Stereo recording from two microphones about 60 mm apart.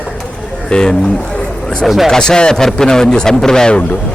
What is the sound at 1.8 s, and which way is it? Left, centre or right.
Speech, centre.